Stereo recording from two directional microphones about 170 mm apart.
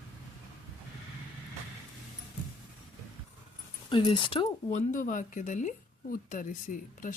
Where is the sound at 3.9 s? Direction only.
30° left (ahead or behind).